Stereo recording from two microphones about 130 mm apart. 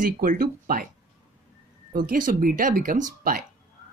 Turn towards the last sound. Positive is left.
turn(degrees=-90)